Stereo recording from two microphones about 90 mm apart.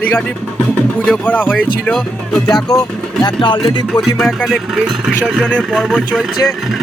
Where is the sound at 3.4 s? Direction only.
65° left (ahead or behind).